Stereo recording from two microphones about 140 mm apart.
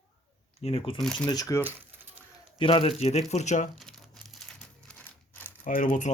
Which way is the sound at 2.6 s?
40° left (ahead or behind).